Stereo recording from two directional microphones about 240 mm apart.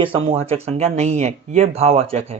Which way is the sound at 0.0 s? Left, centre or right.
Right.